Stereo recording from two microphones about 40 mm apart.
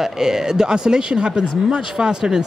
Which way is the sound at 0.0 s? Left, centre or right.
Centre.